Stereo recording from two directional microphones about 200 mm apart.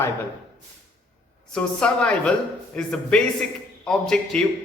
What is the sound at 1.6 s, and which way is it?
A woman's voice, 5° left (ahead or behind).